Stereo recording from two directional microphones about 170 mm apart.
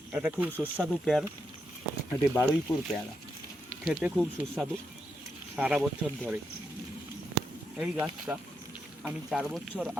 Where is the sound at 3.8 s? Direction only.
Centre (ahead or behind).